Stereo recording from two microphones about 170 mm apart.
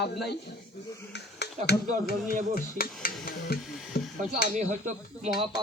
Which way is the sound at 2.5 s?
60° left (ahead or behind).